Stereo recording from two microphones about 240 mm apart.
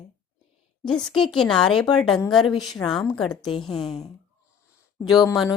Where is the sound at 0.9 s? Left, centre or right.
Centre.